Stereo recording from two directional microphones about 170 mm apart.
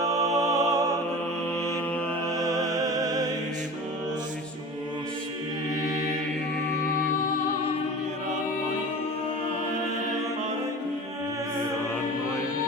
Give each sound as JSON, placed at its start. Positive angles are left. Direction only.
{"t": 0.1, "sound": "music", "side_deg": -20}
{"t": 2.2, "sound": "music", "side_deg": -20}